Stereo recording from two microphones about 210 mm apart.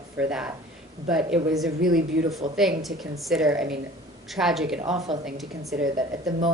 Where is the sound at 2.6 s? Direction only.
Centre (ahead or behind).